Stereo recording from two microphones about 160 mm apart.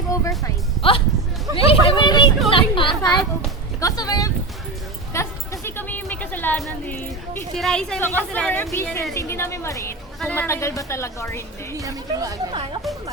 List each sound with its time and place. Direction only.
0.1 s speech: 20° left (ahead or behind)
0.8 s speech: 35° left (ahead or behind)
1.5 s a sound: 35° left (ahead or behind)
3.8 s speech: 20° left (ahead or behind)
5.1 s music: 15° left (ahead or behind)
6.8 s speech: 15° left (ahead or behind)
7.5 s a woman's voice: 5° left (ahead or behind)
11.8 s speech: 20° right (ahead or behind)